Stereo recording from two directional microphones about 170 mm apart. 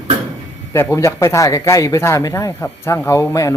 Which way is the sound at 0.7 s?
15° left (ahead or behind).